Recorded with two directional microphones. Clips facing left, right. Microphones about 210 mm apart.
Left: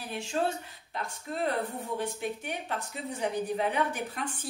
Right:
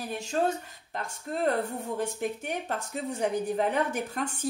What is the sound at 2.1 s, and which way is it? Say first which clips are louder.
A woman's voice: right 3 dB; 45° right (ahead or behind).